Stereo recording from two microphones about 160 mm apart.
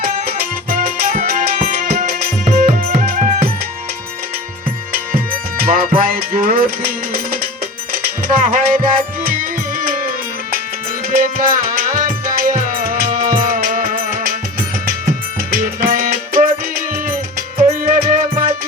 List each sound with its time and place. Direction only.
0.0 s music: 65° right (ahead or behind)
4.9 s music: 65° right (ahead or behind)
11.1 s music: 65° right (ahead or behind)
15.4 s music: 65° right (ahead or behind)